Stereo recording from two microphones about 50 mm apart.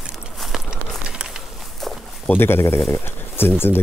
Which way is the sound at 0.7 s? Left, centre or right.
Centre.